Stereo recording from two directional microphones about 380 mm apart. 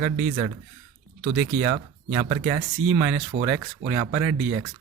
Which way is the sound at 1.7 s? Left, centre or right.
Centre.